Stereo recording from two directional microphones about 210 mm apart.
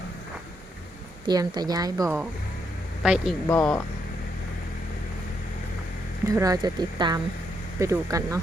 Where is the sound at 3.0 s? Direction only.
Centre (ahead or behind).